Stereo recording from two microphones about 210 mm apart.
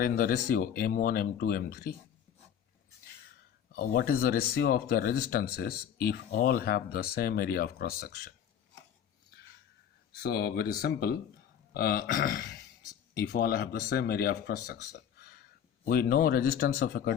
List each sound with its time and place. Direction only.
0.0 s speech: 45° left (ahead or behind)
3.7 s speech: 45° left (ahead or behind)
10.2 s speech: 50° left (ahead or behind)
14.7 s a sound: 50° left (ahead or behind)
15.9 s speech: 45° left (ahead or behind)